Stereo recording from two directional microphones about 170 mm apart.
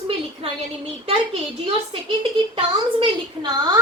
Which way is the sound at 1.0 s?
35° right (ahead or behind).